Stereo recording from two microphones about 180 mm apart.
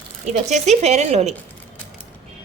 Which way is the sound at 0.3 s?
40° right (ahead or behind).